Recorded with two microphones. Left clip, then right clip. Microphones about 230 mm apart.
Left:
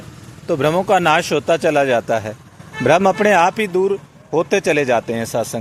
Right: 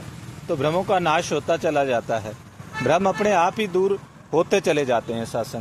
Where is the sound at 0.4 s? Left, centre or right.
Left.